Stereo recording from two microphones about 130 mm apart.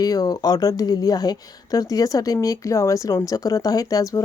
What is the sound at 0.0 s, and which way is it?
Speech, 30° left (ahead or behind).